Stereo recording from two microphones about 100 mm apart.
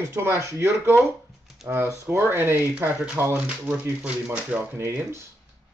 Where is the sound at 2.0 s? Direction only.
25° right (ahead or behind).